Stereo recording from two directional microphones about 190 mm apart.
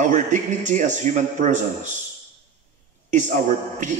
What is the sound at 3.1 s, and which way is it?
Speech, 40° right (ahead or behind).